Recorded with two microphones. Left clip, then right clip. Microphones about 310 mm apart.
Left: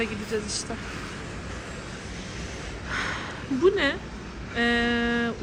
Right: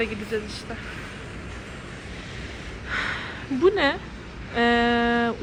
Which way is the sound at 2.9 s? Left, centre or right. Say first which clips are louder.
Right 2 dB; centre.